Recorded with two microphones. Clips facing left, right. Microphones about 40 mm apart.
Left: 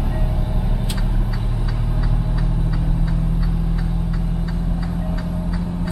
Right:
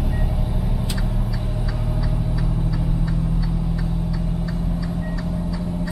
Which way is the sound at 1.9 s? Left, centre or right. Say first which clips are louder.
Even; left.